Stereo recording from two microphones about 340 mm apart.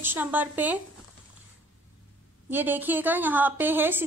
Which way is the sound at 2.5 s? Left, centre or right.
Centre.